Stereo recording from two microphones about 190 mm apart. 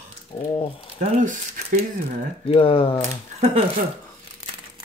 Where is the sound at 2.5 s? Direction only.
30° left (ahead or behind).